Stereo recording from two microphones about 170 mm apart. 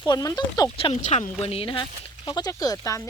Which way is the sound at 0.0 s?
20° left (ahead or behind).